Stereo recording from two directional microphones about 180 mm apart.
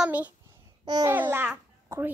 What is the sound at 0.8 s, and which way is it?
Speech, 25° right (ahead or behind).